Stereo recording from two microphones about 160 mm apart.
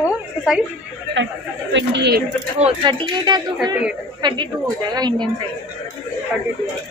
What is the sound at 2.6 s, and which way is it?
Speech, 30° right (ahead or behind).